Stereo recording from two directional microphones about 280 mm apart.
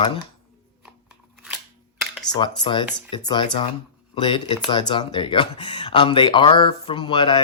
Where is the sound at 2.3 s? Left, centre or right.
Centre.